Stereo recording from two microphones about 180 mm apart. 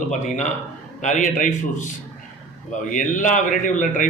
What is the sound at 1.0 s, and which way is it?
Speech, 45° left (ahead or behind).